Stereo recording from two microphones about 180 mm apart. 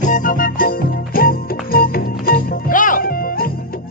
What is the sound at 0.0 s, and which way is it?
Music, 45° left (ahead or behind).